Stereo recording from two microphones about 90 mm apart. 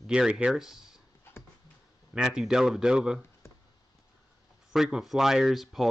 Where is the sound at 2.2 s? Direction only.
5° right (ahead or behind).